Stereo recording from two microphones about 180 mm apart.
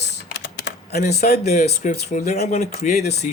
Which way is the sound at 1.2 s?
50° left (ahead or behind).